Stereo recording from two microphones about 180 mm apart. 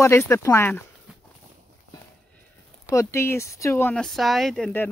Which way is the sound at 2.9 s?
15° left (ahead or behind).